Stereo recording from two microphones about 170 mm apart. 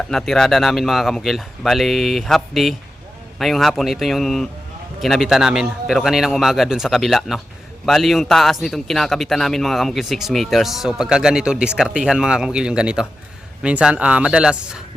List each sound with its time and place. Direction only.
0.1 s a man's voice: centre (ahead or behind)